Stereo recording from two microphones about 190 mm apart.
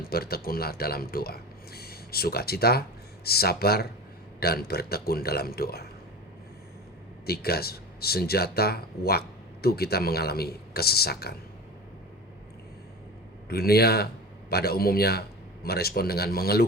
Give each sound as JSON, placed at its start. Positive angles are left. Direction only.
{"t": 0.0, "sound": "speech", "side_deg": 55}
{"t": 7.3, "sound": "speech", "side_deg": 55}
{"t": 13.5, "sound": "speech", "side_deg": 55}